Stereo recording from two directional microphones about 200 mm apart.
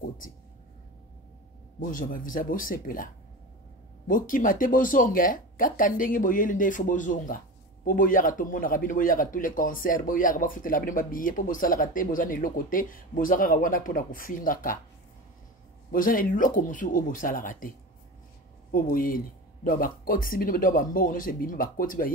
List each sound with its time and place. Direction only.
1.8 s a man's voice: 45° left (ahead or behind)
4.1 s a man's voice: 45° left (ahead or behind)
15.9 s a man's voice: 45° left (ahead or behind)